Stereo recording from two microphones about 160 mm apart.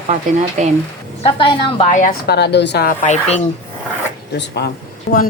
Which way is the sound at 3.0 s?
45° left (ahead or behind).